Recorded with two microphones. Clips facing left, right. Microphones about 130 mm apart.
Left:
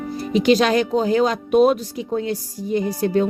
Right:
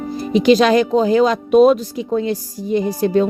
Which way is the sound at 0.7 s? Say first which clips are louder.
Right 4 dB; 90° right.